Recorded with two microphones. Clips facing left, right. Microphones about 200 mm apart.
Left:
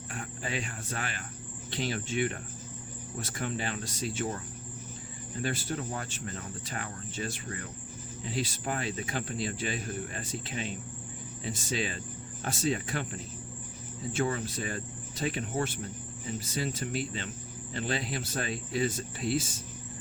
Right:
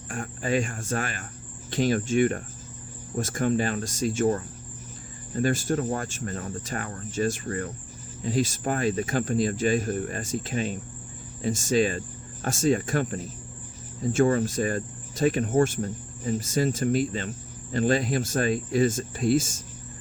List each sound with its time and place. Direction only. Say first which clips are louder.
0.1 s speech: right 10 dB; 45° right (ahead or behind)